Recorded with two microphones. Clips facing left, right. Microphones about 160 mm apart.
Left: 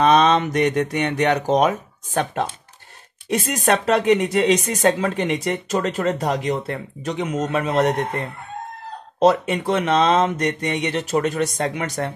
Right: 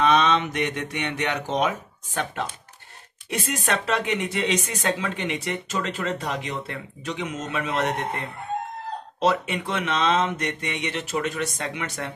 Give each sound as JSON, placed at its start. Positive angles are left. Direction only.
{"t": 0.0, "sound": "speech", "side_deg": 40}
{"t": 9.2, "sound": "speech", "side_deg": 40}